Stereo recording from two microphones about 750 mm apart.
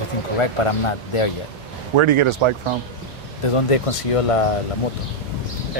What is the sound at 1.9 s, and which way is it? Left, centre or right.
Speech, right.